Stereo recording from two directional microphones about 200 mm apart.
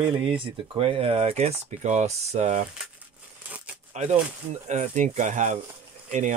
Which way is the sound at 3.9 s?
35° right (ahead or behind).